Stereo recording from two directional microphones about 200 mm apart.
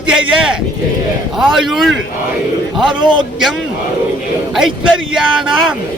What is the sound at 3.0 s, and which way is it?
Speech, 25° right (ahead or behind).